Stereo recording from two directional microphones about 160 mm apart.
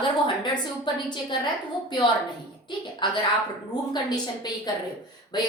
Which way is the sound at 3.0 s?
30° left (ahead or behind).